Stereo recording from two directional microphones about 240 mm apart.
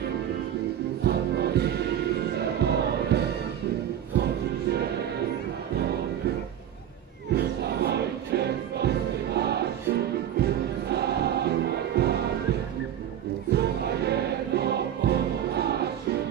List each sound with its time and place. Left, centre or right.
1.0 s music: right
7.3 s music: right
13.5 s music: right